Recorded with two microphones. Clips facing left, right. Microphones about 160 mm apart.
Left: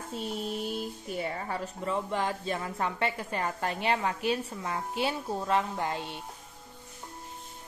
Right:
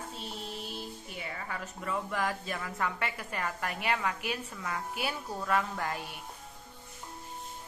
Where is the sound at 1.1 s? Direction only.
35° left (ahead or behind).